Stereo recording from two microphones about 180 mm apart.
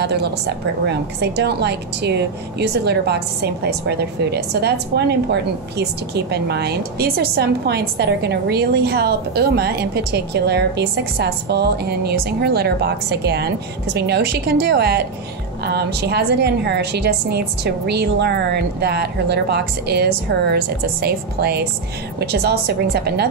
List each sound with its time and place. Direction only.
0.0 s a woman's voice: 65° right (ahead or behind)